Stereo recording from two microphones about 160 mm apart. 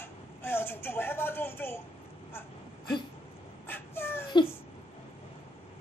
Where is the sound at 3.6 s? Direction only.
15° left (ahead or behind).